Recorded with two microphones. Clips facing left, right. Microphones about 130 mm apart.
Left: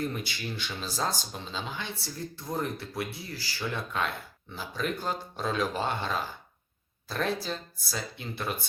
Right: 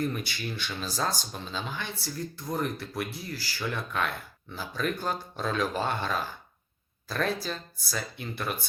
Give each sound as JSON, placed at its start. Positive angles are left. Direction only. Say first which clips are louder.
{"t": 0.1, "sound": "speech", "louder": "right 1 dB", "side_deg": 25}